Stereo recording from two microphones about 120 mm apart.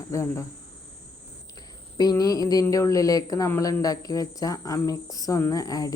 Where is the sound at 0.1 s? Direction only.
25° left (ahead or behind).